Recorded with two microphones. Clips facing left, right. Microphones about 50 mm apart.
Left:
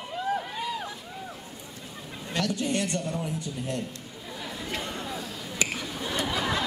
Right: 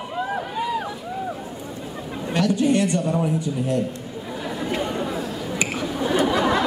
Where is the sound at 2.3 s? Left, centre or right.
Right.